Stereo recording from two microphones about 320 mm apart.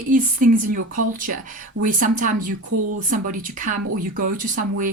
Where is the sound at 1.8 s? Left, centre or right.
Right.